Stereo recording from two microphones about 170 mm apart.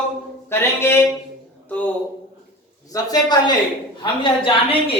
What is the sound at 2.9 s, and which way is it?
A woman's voice, 25° left (ahead or behind).